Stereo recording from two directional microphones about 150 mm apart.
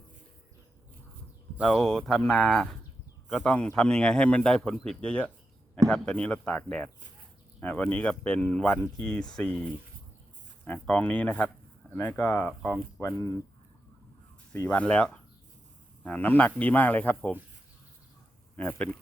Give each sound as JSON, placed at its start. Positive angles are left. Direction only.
{"t": 1.6, "sound": "speech", "side_deg": 5}
{"t": 13.0, "sound": "speech", "side_deg": 20}
{"t": 14.5, "sound": "speech", "side_deg": 10}
{"t": 18.5, "sound": "a man's voice", "side_deg": 10}